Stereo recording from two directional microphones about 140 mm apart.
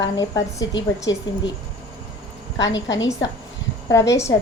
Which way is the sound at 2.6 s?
25° left (ahead or behind).